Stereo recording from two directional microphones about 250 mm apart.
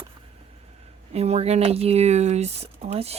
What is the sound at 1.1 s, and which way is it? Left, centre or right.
Speech, right.